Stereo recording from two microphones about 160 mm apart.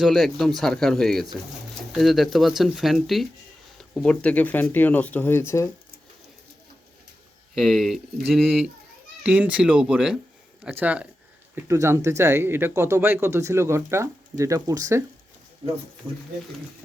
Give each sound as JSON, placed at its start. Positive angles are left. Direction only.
{"t": 0.0, "sound": "speech", "side_deg": 0}
{"t": 7.5, "sound": "speech", "side_deg": 0}
{"t": 9.2, "sound": "speech", "side_deg": -10}
{"t": 16.0, "sound": "speech", "side_deg": -20}